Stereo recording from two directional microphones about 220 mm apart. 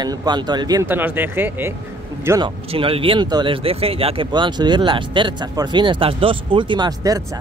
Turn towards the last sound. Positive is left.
turn(degrees=-15)  # may be behind; listen again after turning